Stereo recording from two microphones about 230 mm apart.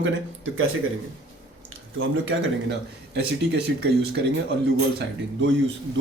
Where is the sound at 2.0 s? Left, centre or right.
Right.